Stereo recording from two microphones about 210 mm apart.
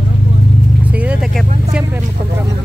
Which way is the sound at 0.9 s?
5° right (ahead or behind).